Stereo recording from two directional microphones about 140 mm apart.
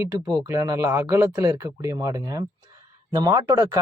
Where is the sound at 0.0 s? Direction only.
15° right (ahead or behind).